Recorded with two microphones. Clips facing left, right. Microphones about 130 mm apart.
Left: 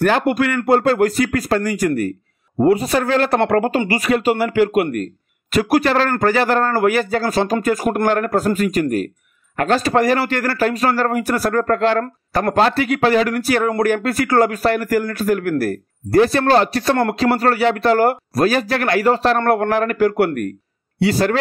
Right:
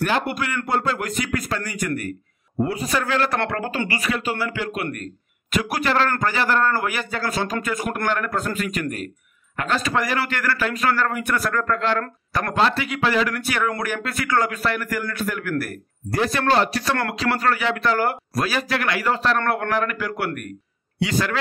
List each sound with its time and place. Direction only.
0.0 s a man's voice: 45° left (ahead or behind)
2.5 s a man's voice: 50° left (ahead or behind)
2.9 s a man's voice: 40° left (ahead or behind)